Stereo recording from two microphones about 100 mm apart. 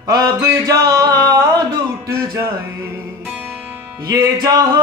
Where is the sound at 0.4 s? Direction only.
25° right (ahead or behind).